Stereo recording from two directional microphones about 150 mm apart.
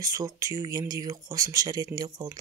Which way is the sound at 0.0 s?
25° right (ahead or behind).